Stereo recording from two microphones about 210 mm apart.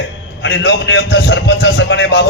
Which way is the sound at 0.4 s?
55° left (ahead or behind).